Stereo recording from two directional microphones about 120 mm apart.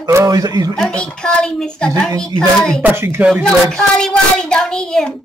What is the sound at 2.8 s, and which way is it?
Speech, 20° right (ahead or behind).